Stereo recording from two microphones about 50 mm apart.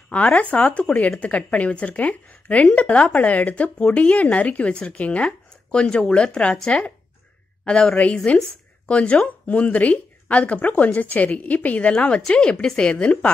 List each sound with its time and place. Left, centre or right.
0.1 s speech: left
7.6 s speech: left